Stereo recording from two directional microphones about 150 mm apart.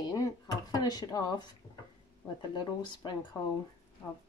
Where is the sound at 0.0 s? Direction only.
25° left (ahead or behind).